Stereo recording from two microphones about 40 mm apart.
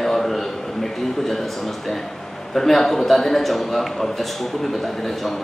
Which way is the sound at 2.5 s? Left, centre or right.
Centre.